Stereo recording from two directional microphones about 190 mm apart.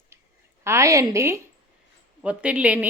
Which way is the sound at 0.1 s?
15° right (ahead or behind).